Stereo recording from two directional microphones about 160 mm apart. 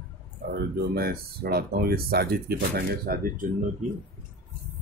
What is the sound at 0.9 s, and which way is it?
Speech, 75° right (ahead or behind).